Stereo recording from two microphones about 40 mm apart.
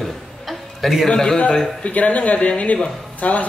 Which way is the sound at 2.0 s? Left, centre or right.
Left.